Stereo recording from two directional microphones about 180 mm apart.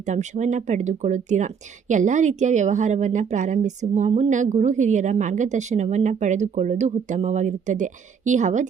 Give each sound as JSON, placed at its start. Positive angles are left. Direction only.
{"t": 0.0, "sound": "speech", "side_deg": -40}